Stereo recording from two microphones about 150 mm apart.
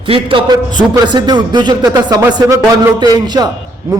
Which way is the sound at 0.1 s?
35° right (ahead or behind).